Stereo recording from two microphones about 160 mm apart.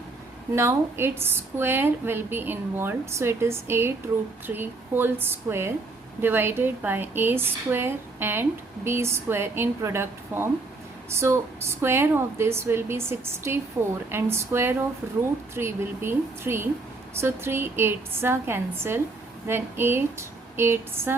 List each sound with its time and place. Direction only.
0.5 s a woman's voice: 15° right (ahead or behind)